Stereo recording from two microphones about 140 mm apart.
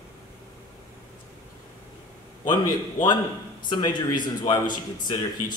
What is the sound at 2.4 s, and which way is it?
Speech, 30° left (ahead or behind).